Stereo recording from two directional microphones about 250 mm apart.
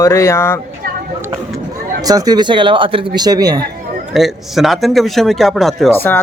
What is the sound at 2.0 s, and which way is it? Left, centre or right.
Speech, centre.